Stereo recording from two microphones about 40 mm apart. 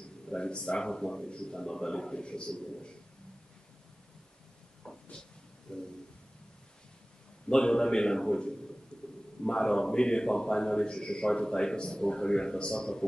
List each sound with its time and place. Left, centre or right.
0.3 s a man's voice: left
4.8 s a sound: centre
7.4 s a man's voice: centre